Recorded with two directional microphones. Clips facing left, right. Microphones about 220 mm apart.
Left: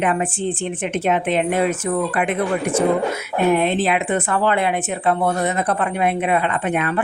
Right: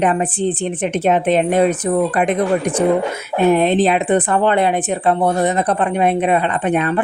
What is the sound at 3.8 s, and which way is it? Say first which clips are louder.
Speech: right 5 dB; 35° right (ahead or behind).